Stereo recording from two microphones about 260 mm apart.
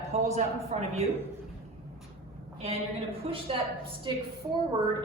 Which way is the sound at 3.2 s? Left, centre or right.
Right.